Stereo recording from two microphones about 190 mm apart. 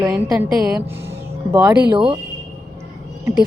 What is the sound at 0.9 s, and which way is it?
Speech, 15° right (ahead or behind).